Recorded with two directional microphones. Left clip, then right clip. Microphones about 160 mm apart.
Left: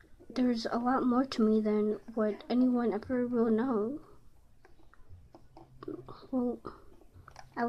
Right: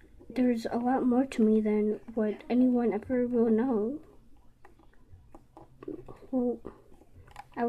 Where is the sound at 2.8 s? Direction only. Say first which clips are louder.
Right 3 dB; 10° right (ahead or behind).